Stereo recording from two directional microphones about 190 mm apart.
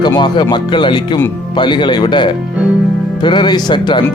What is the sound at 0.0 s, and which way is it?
Speech, 25° left (ahead or behind).